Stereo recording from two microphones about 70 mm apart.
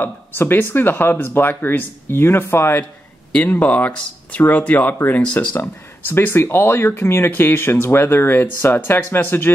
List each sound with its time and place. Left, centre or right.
0.0 s speech: left
5.6 s speech: left